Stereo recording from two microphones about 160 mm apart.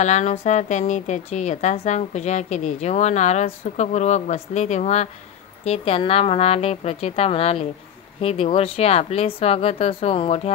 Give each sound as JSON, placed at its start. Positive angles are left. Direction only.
{"t": 0.0, "sound": "a woman's voice", "side_deg": 45}